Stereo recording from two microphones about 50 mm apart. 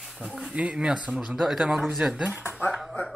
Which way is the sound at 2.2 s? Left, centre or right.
Right.